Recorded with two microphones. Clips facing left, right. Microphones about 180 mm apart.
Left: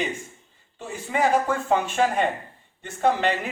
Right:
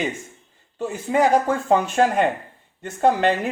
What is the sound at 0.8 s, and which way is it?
Speech, 40° right (ahead or behind).